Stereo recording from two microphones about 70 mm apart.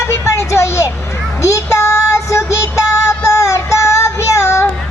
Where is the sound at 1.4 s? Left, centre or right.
Left.